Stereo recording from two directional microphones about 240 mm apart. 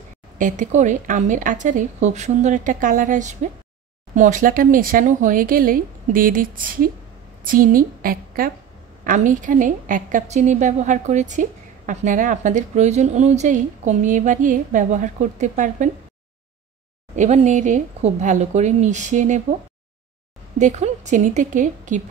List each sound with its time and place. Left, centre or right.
0.4 s a woman's voice: right
17.1 s speech: right
20.5 s a woman's voice: right